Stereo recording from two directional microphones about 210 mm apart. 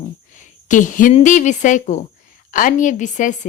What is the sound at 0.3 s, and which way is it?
A woman's voice, 35° left (ahead or behind).